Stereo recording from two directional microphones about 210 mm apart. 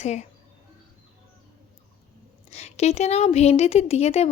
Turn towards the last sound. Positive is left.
turn(degrees=30)  # may be behind; listen again after turning